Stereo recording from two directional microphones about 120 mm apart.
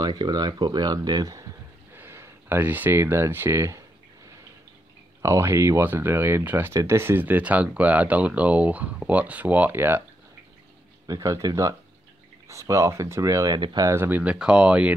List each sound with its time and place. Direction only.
0.0 s speech: 35° right (ahead or behind)
2.0 s speech: 20° right (ahead or behind)
5.2 s speech: 20° right (ahead or behind)
11.1 s speech: 30° right (ahead or behind)
13.9 s speech: 15° right (ahead or behind)